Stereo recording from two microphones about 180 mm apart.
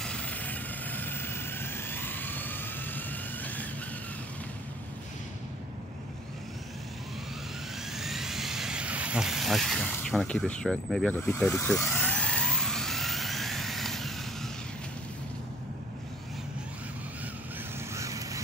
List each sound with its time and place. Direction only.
0.0 s vehicle: 5° left (ahead or behind)
7.9 s vehicle: centre (ahead or behind)
17.9 s vehicle: 15° right (ahead or behind)